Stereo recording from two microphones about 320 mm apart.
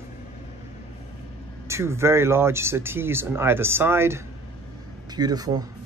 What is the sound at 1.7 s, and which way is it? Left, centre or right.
Speech, centre.